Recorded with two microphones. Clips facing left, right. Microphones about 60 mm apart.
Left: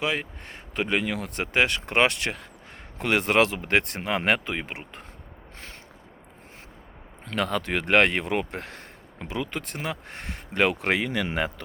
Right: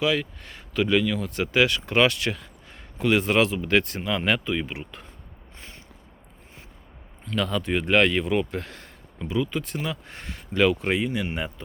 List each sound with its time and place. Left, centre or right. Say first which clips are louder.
0.0 s speech: right 4 dB; left
7.3 s speech: even; left
7.6 s speech: even; left